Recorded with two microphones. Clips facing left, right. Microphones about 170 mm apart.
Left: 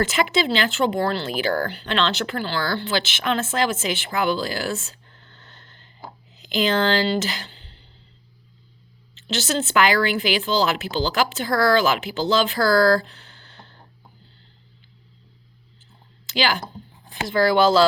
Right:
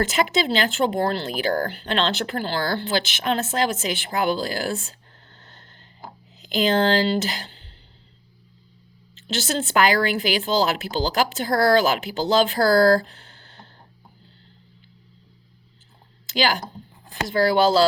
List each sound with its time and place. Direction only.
0.1 s speech: 45° right (ahead or behind)
5.3 s a sound: 40° right (ahead or behind)
6.4 s speech: 40° right (ahead or behind)
9.7 s speech: 40° right (ahead or behind)
13.1 s a sound: 45° right (ahead or behind)
16.3 s speech: 40° right (ahead or behind)